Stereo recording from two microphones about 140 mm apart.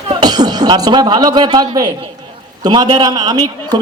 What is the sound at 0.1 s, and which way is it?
A man's voice, 30° right (ahead or behind).